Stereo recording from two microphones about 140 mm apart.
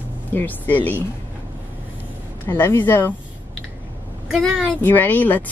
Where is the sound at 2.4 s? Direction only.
15° left (ahead or behind).